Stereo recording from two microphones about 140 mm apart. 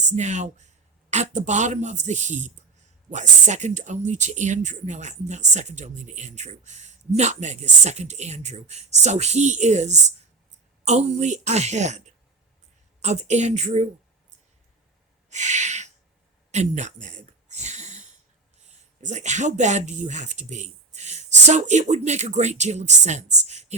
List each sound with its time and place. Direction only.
0.1 s speech: 55° right (ahead or behind)
15.3 s a sound: 55° right (ahead or behind)
19.0 s speech: 55° right (ahead or behind)